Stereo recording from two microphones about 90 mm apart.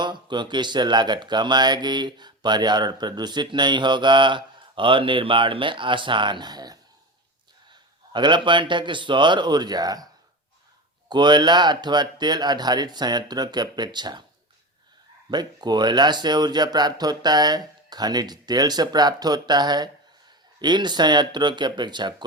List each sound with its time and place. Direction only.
0.0 s speech: 55° right (ahead or behind)
8.1 s speech: 60° right (ahead or behind)
11.1 s speech: 55° right (ahead or behind)
15.3 s speech: 55° right (ahead or behind)